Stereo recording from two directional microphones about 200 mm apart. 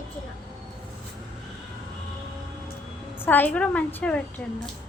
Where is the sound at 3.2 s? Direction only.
10° left (ahead or behind).